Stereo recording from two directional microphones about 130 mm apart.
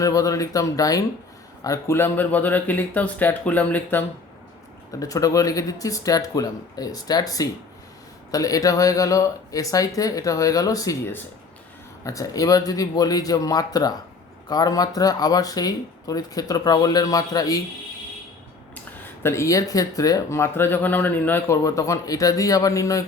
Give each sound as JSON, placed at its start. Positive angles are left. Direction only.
{"t": 0.0, "sound": "speech", "side_deg": 25}
{"t": 4.9, "sound": "speech", "side_deg": 25}
{"t": 19.2, "sound": "speech", "side_deg": 20}